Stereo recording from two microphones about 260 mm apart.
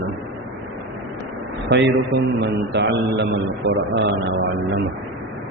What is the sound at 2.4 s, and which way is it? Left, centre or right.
A man's voice, right.